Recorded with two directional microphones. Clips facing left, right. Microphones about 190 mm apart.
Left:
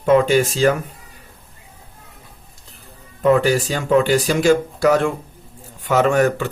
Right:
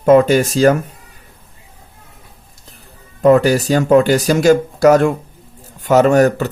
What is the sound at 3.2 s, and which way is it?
Speech, 40° right (ahead or behind).